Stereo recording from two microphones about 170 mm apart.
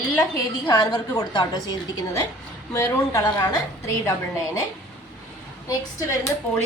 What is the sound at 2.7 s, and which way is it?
Speech, 15° left (ahead or behind).